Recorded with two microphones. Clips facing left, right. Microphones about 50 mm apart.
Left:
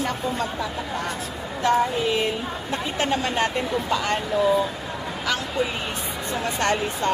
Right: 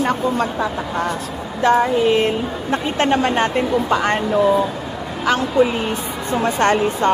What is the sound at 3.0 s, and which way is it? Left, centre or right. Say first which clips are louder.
Speech: right 6 dB; right.